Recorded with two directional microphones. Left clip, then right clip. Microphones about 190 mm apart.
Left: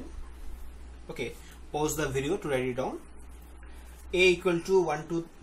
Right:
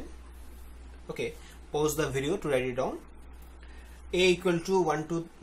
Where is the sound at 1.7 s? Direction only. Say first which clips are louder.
Right 1 dB; 20° right (ahead or behind).